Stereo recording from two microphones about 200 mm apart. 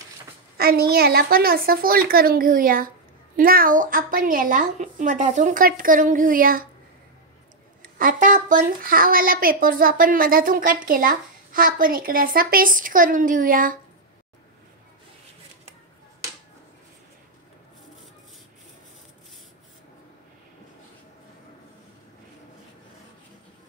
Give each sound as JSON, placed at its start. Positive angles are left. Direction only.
{"t": 0.6, "sound": "speech", "side_deg": -50}
{"t": 7.8, "sound": "speech", "side_deg": -45}